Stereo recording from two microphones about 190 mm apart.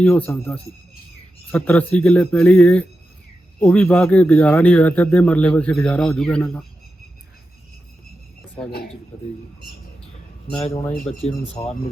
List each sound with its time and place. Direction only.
0.0 s a man's voice: 10° left (ahead or behind)
11.2 s speech: 30° left (ahead or behind)